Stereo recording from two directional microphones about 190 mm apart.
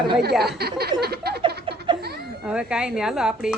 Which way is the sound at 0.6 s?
55° right (ahead or behind).